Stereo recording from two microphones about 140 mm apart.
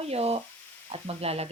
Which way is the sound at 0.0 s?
45° right (ahead or behind).